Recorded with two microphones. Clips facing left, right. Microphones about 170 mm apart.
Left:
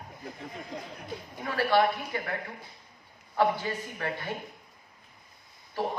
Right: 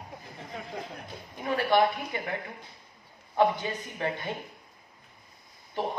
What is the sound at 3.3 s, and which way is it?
Speech, 20° right (ahead or behind).